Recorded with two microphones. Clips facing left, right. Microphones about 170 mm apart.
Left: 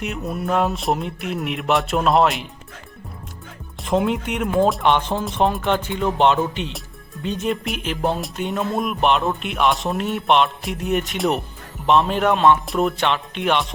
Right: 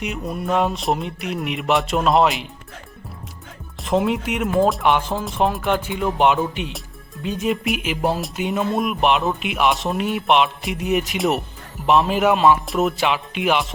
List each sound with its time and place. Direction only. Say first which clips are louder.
0.0 s music: even; centre (ahead or behind)
3.8 s music: even; centre (ahead or behind)